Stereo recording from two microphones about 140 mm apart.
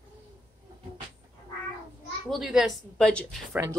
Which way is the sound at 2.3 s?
5° right (ahead or behind).